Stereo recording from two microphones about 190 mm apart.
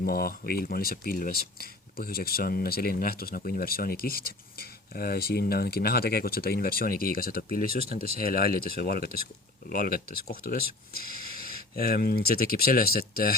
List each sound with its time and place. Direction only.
0.0 s speech: 50° left (ahead or behind)